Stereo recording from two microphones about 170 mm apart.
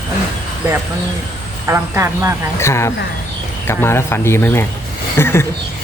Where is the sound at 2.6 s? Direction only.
15° left (ahead or behind).